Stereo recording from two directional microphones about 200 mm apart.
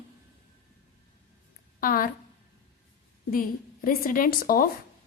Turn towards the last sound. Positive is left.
turn(degrees=45)  # may be behind; listen again after turning